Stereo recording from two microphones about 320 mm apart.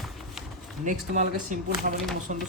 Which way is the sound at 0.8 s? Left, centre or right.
Right.